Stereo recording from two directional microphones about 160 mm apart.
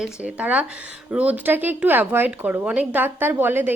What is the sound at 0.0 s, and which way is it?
Speech, 5° right (ahead or behind).